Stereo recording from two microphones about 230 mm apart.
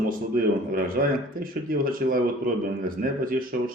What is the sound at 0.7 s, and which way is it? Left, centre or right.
A man's voice, right.